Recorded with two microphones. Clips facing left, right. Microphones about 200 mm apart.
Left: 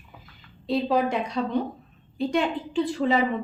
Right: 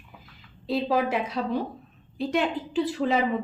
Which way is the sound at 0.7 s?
Centre (ahead or behind).